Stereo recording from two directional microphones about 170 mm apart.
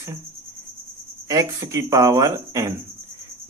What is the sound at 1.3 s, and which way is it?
Speech, 20° right (ahead or behind).